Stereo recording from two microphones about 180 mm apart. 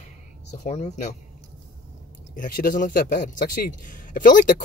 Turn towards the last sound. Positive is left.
turn(degrees=45)  # may be behind; listen again after turning